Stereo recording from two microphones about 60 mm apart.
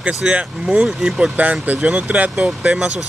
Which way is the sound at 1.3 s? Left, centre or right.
Right.